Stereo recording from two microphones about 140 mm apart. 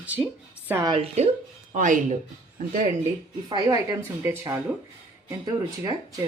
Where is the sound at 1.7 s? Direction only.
65° right (ahead or behind).